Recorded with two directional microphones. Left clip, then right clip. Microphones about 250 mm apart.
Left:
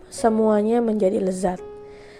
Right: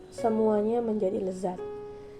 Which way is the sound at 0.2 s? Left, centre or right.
Left.